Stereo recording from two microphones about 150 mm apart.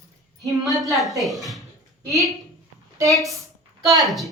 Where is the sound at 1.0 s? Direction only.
Centre (ahead or behind).